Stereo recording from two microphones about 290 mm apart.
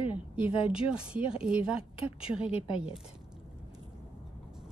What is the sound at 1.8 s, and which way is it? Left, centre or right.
Speech, centre.